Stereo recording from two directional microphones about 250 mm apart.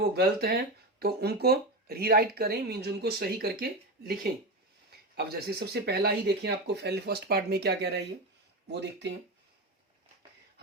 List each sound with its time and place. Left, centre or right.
0.0 s speech: right